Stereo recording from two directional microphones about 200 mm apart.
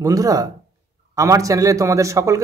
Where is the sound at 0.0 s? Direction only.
15° right (ahead or behind).